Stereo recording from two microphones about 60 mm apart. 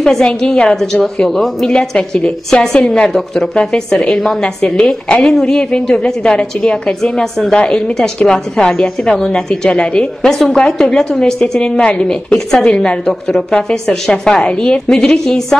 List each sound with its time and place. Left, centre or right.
0.0 s a woman's voice: centre
3.1 s a woman's voice: centre